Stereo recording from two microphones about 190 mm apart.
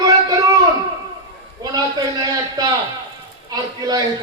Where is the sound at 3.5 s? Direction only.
20° right (ahead or behind).